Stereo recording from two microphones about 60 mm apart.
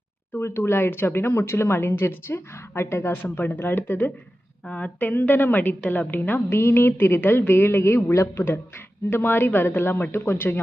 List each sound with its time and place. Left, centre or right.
0.3 s speech: left
3.3 s a woman's voice: left
9.0 s a woman's voice: left